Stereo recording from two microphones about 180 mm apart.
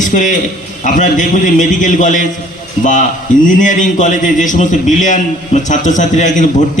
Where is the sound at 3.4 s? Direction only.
45° left (ahead or behind).